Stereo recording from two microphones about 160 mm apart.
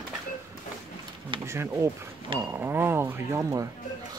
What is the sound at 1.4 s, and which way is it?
Speech, 15° right (ahead or behind).